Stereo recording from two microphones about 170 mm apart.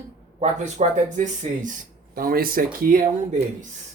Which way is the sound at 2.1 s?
60° right (ahead or behind).